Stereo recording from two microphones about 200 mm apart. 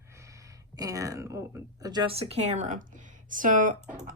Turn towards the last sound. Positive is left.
turn(degrees=-40)  # may be behind; listen again after turning